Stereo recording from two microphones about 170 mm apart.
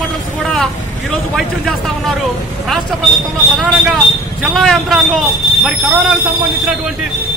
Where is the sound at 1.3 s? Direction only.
Centre (ahead or behind).